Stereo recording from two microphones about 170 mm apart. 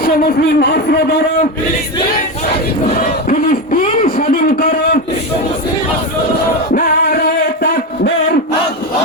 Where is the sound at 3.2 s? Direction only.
55° left (ahead or behind).